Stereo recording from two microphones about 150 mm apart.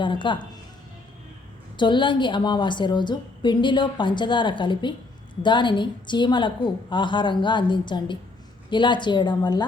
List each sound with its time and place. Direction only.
0.0 s a woman's voice: 30° left (ahead or behind)
1.7 s a woman's voice: 30° left (ahead or behind)